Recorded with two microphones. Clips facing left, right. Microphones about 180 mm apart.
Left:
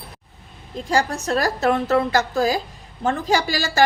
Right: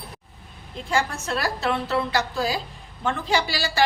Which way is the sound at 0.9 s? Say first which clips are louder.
Left 4 dB; 40° left (ahead or behind).